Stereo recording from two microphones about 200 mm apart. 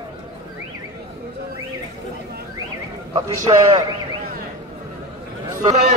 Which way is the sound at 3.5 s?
25° right (ahead or behind).